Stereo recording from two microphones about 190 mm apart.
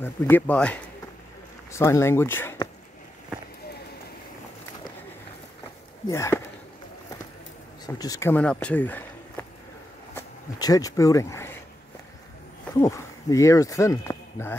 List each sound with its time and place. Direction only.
0.0 s speech: 10° left (ahead or behind)
6.0 s speech: 15° left (ahead or behind)
7.8 s speech: 20° left (ahead or behind)
12.8 s speech: 15° left (ahead or behind)